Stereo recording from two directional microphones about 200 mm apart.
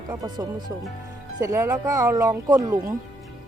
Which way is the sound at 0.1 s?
20° right (ahead or behind).